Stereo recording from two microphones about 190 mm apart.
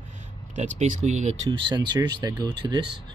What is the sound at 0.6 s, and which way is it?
Speech, 35° right (ahead or behind).